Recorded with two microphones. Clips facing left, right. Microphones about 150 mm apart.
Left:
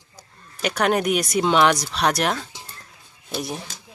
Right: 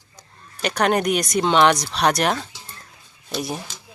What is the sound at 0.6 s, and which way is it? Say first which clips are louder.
Speech: right 1 dB; 5° left (ahead or behind).